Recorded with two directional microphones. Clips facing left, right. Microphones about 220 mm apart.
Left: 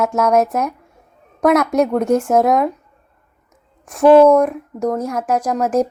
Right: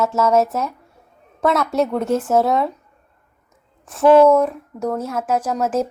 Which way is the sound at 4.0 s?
15° left (ahead or behind).